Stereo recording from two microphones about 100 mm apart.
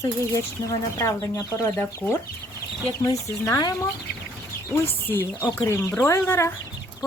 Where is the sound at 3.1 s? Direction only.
35° left (ahead or behind).